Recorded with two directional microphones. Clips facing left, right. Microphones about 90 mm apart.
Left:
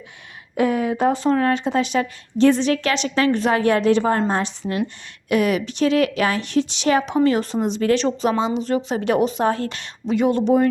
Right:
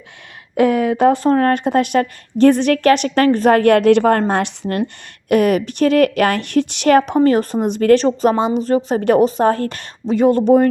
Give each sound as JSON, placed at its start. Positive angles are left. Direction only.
{"t": 0.5, "sound": "speech", "side_deg": -70}
{"t": 1.2, "sound": "a woman's voice", "side_deg": -50}
{"t": 5.3, "sound": "a woman's voice", "side_deg": -50}